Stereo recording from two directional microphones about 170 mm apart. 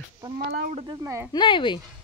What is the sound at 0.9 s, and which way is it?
Speech, 15° right (ahead or behind).